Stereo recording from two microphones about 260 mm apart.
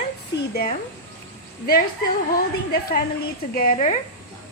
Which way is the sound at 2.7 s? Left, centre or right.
Left.